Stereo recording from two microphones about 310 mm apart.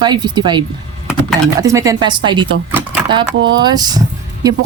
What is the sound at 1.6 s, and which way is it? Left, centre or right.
Speech, centre.